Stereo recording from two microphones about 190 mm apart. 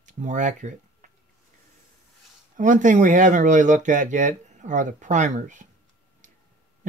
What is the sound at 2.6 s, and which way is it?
Speech, 40° right (ahead or behind).